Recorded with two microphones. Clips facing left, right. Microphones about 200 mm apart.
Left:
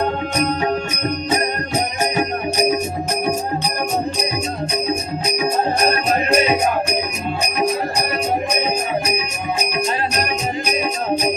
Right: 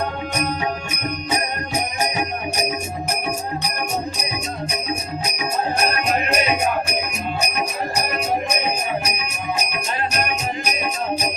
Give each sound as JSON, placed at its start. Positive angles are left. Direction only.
{"t": 5.9, "sound": "music", "side_deg": 35}